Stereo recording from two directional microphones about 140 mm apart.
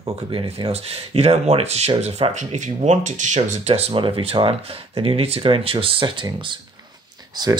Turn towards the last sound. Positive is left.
turn(degrees=-30)  # may be behind; listen again after turning